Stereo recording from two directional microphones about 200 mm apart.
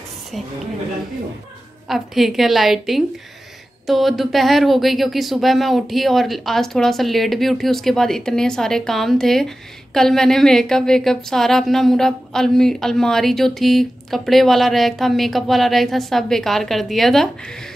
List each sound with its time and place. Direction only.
1.9 s speech: centre (ahead or behind)